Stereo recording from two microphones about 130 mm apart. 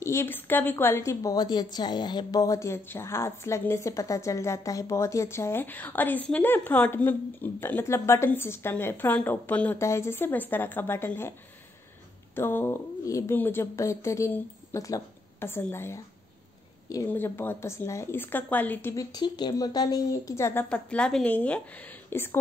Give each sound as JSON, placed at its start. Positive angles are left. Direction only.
{"t": 0.0, "sound": "a woman's voice", "side_deg": 20}
{"t": 12.4, "sound": "a woman's voice", "side_deg": 20}
{"t": 17.1, "sound": "speech", "side_deg": 15}
{"t": 19.1, "sound": "a woman's voice", "side_deg": 30}
{"t": 20.6, "sound": "speech", "side_deg": 10}